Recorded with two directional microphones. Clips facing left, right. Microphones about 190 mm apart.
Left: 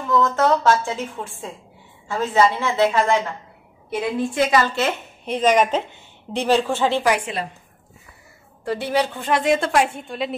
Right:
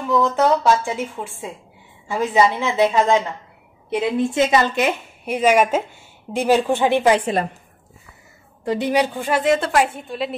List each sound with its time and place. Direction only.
0.1 s a woman's voice: 15° right (ahead or behind)
8.6 s a woman's voice: 15° right (ahead or behind); by 10.3 s centre (ahead or behind)